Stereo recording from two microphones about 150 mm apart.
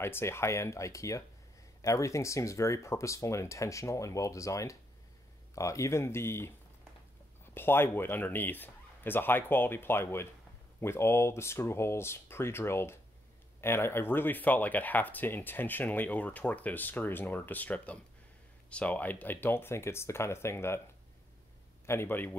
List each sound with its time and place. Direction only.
0.0 s speech: 15° left (ahead or behind)
7.5 s speech: 15° left (ahead or behind)
21.8 s speech: 15° left (ahead or behind)